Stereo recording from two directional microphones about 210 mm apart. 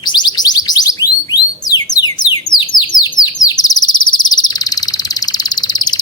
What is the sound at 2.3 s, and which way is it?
Bird, 20° left (ahead or behind).